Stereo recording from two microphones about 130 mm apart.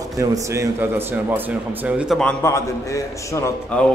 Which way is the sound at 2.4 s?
25° left (ahead or behind).